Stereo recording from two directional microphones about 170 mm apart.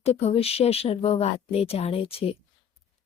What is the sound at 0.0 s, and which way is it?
A woman's voice, 35° left (ahead or behind).